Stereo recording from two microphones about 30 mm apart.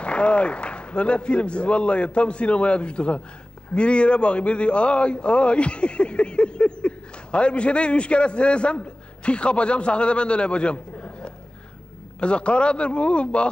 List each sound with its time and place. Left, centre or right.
0.0 s a man's voice: left